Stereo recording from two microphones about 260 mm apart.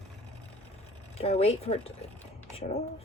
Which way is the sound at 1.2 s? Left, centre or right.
Left.